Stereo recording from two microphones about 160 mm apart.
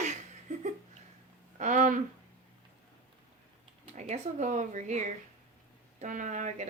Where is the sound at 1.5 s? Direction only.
50° right (ahead or behind).